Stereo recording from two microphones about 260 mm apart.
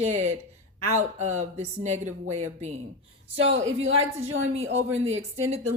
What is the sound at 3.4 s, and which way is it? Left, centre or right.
Speech, right.